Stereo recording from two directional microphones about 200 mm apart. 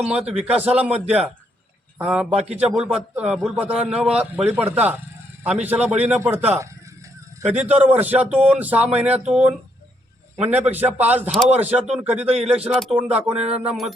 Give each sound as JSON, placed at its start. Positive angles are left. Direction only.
{"t": 0.0, "sound": "a man's voice", "side_deg": -5}
{"t": 2.3, "sound": "a man's voice", "side_deg": -30}
{"t": 2.6, "sound": "a man's voice", "side_deg": -5}